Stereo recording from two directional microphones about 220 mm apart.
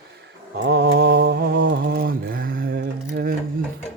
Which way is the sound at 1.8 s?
40° right (ahead or behind).